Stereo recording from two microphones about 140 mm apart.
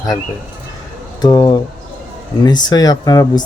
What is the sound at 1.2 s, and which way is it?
A man's voice, 30° left (ahead or behind).